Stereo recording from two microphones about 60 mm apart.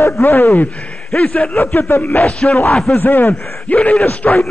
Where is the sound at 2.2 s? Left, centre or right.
Centre.